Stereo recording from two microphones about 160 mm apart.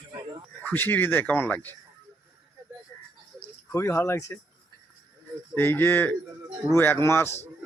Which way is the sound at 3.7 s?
15° left (ahead or behind).